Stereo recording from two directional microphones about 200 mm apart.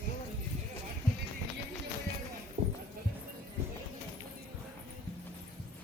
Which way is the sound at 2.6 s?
35° right (ahead or behind).